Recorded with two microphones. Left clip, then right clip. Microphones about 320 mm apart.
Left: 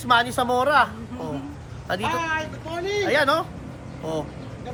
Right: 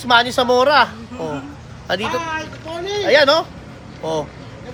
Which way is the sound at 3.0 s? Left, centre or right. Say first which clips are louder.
Right 8 dB; right.